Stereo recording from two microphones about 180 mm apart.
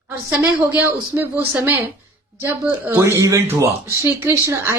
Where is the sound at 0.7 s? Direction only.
10° right (ahead or behind).